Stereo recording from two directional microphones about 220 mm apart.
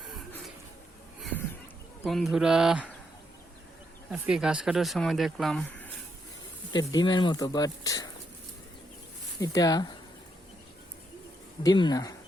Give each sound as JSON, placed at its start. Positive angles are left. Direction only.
{"t": 1.2, "sound": "a sound", "side_deg": 5}
{"t": 2.0, "sound": "speech", "side_deg": 0}
{"t": 4.1, "sound": "speech", "side_deg": -5}
{"t": 6.7, "sound": "speech", "side_deg": 20}
{"t": 9.4, "sound": "speech", "side_deg": 15}
{"t": 11.6, "sound": "speech", "side_deg": 20}